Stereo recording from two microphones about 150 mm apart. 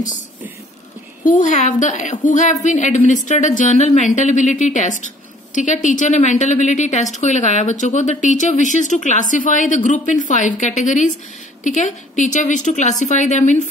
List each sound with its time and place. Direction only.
1.2 s a woman's voice: 55° left (ahead or behind)